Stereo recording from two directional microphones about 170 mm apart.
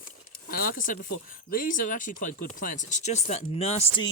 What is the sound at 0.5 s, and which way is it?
Speech, 55° left (ahead or behind).